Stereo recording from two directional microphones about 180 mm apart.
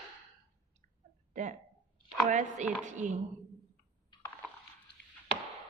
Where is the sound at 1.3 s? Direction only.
40° right (ahead or behind).